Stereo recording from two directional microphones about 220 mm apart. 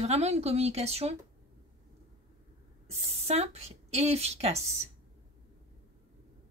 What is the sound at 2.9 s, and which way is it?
Speech, 25° right (ahead or behind).